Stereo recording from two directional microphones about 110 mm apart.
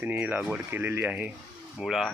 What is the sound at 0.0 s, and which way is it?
Speech, 15° right (ahead or behind).